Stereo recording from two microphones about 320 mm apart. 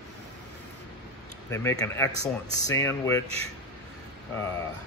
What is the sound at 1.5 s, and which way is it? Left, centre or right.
Speech, centre.